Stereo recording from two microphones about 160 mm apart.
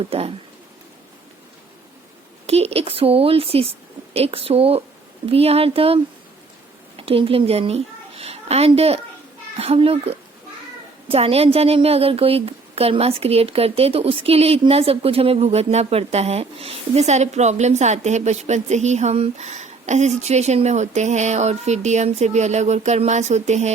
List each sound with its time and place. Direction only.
0.0 s a woman's voice: 35° right (ahead or behind)
2.5 s a woman's voice: 40° right (ahead or behind)